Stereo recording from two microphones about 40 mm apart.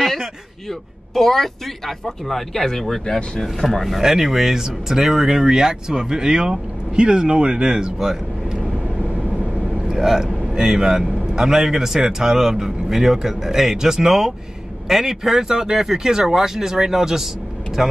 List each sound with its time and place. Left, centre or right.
0.7 s speech: centre
4.0 s speech: centre
9.8 s speech: centre